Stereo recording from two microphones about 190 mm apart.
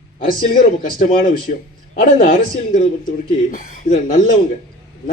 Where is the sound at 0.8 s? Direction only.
45° left (ahead or behind).